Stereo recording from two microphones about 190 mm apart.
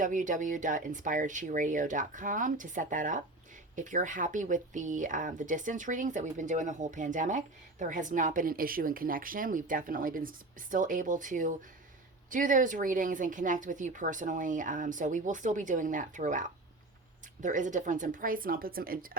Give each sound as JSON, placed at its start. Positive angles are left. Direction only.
{"t": 0.0, "sound": "speech", "side_deg": -40}